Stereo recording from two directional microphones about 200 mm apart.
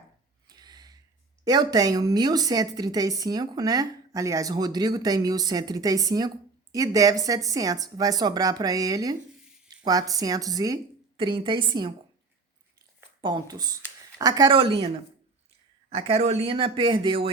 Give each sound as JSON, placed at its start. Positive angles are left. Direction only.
{"t": 0.4, "sound": "a sound", "side_deg": -20}
{"t": 1.5, "sound": "speech", "side_deg": -20}
{"t": 13.0, "sound": "speech", "side_deg": -20}
{"t": 15.9, "sound": "speech", "side_deg": -30}